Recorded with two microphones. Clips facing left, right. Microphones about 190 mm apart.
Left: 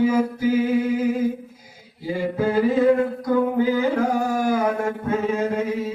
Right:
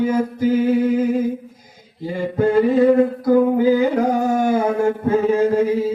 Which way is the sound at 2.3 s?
5° left (ahead or behind).